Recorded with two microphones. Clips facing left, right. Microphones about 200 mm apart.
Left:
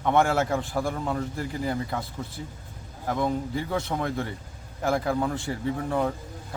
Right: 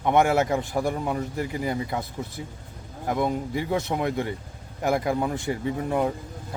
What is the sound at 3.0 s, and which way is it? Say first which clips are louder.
A man's voice: right 1 dB; 15° right (ahead or behind).